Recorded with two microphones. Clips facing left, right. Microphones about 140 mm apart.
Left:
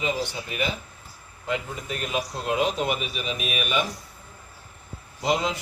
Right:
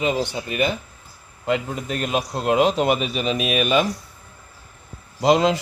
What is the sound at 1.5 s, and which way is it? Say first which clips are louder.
A man's voice: right 6 dB; 75° right (ahead or behind).